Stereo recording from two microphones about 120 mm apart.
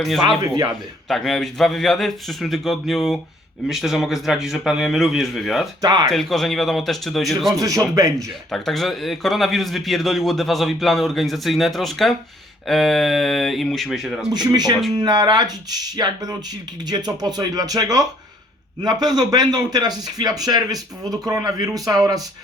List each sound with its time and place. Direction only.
0.3 s a man's voice: 30° right (ahead or behind)
1.0 s a man's voice: centre (ahead or behind)
5.8 s a man's voice: 35° right (ahead or behind)
6.1 s a man's voice: centre (ahead or behind)
14.3 s a man's voice: 35° right (ahead or behind)